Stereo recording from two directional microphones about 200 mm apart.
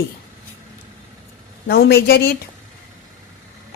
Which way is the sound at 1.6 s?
50° left (ahead or behind).